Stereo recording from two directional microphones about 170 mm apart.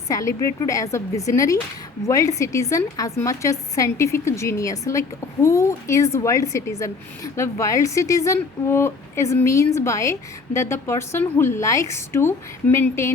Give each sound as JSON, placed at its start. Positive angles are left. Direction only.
{"t": 0.1, "sound": "a woman's voice", "side_deg": 20}